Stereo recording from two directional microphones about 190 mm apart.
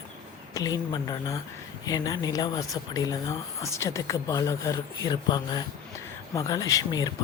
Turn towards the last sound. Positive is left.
turn(degrees=20)  # may be behind; listen again after turning